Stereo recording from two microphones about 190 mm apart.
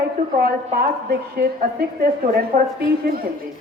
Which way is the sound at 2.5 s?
50° right (ahead or behind).